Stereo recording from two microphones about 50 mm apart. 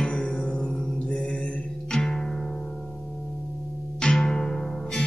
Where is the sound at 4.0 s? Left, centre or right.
Centre.